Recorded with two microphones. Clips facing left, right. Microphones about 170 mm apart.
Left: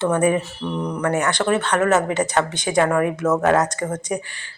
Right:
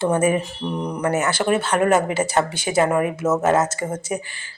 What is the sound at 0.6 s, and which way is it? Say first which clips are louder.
Speech: even; 20° right (ahead or behind).